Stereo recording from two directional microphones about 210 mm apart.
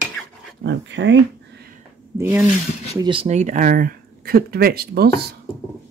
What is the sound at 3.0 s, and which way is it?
Speech, 25° right (ahead or behind).